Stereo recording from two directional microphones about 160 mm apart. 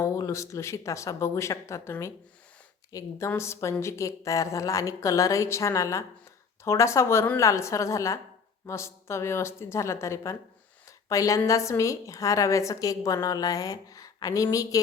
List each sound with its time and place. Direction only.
0.0 s a woman's voice: 20° left (ahead or behind)